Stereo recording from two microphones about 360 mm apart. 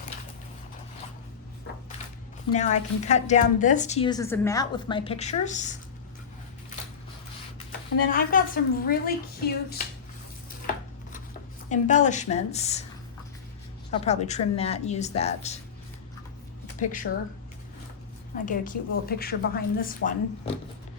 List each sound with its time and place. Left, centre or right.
2.6 s a woman's voice: centre
7.9 s a woman's voice: left
11.7 s a woman's voice: centre
13.9 s a woman's voice: centre
16.7 s speech: left
18.4 s a woman's voice: left